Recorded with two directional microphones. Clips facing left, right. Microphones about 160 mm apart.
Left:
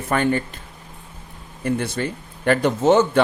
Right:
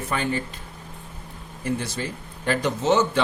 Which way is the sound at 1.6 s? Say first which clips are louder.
Left 5 dB; 60° left (ahead or behind).